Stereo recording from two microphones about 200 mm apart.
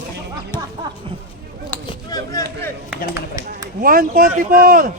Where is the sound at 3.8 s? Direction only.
45° right (ahead or behind).